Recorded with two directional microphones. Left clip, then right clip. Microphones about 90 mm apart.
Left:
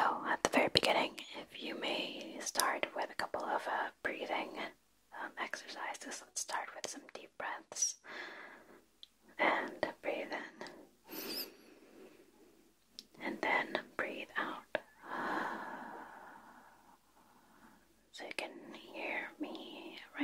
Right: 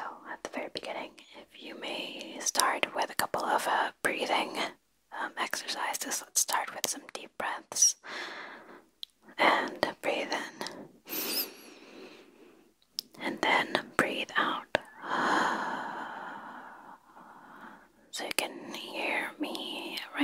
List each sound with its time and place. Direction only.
0.0 s whispering: 25° left (ahead or behind); by 2.3 s 5° right (ahead or behind)
2.3 s whispering: 20° right (ahead or behind); by 20.2 s 35° right (ahead or behind)